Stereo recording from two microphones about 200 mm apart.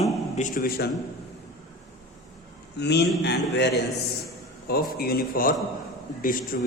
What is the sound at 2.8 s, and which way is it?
A man's voice, 55° left (ahead or behind).